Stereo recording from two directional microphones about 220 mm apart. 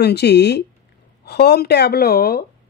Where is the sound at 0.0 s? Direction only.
50° left (ahead or behind).